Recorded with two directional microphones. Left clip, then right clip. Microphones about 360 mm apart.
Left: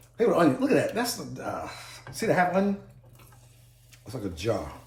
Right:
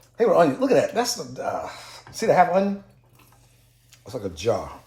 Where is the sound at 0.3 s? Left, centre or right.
Centre.